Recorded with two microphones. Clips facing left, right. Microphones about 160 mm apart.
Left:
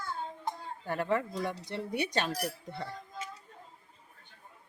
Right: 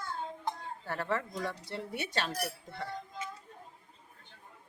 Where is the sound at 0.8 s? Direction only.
15° left (ahead or behind).